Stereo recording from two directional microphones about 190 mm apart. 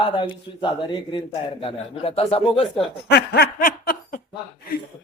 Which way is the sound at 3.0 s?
55° left (ahead or behind).